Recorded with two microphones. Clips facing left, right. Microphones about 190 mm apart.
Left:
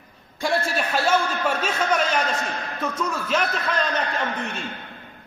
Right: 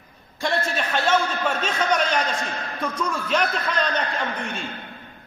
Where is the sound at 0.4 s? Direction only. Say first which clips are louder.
Left 1 dB; 10° left (ahead or behind).